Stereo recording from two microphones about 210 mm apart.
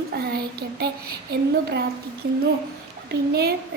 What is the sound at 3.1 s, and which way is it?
Speech, 50° right (ahead or behind).